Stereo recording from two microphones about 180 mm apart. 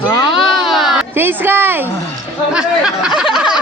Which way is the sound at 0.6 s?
Centre (ahead or behind).